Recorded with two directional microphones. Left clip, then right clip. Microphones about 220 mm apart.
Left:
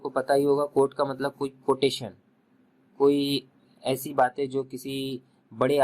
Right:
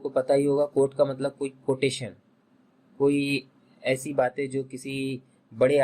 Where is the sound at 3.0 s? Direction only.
25° left (ahead or behind).